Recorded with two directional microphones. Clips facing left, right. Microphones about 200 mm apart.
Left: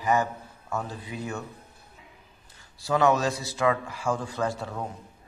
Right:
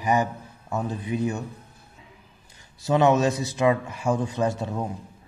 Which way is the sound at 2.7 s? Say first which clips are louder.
Right 3 dB; 20° right (ahead or behind).